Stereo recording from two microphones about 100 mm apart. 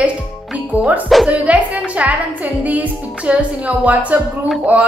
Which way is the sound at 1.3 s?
15° right (ahead or behind).